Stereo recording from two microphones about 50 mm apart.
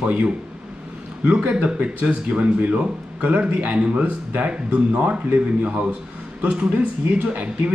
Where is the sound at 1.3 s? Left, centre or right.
Right.